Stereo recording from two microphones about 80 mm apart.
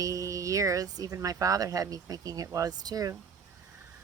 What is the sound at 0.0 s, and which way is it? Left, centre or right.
Speech, right.